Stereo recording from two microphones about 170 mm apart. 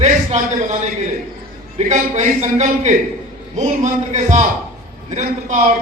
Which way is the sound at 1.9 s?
45° right (ahead or behind).